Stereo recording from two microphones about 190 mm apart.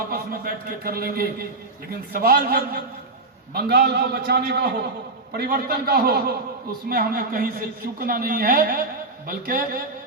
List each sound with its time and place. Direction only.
0.1 s a man's voice: 50° right (ahead or behind)